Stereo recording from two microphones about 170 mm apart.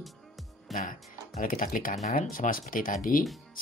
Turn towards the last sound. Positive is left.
turn(degrees=55)  # may be behind; listen again after turning